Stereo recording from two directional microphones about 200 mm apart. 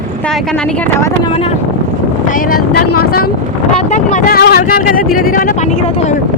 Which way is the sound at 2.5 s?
50° left (ahead or behind).